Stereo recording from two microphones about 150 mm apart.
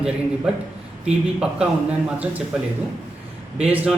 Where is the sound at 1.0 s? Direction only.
5° right (ahead or behind).